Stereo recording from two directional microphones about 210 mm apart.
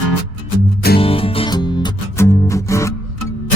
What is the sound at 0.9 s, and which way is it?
Music, 25° left (ahead or behind).